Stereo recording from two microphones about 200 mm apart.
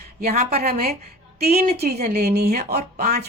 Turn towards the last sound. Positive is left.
turn(degrees=-45)  # may be behind; listen again after turning